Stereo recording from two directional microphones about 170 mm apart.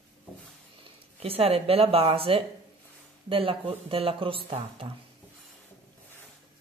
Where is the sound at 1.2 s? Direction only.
35° right (ahead or behind).